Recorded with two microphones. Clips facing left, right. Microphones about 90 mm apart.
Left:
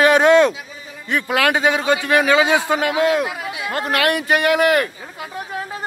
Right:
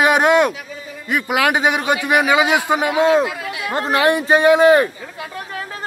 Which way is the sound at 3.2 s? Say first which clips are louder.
Right 1 dB; 20° left (ahead or behind).